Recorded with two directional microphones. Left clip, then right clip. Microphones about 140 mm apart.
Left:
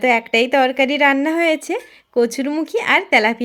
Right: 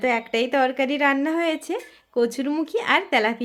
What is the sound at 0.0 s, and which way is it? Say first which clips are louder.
Speech: left 7 dB; 40° left (ahead or behind).